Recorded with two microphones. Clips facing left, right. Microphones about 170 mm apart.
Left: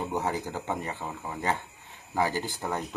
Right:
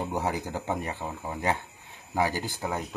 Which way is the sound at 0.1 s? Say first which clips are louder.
Even; 15° right (ahead or behind).